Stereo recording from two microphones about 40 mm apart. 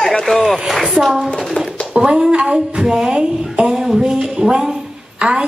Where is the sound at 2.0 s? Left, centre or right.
Centre.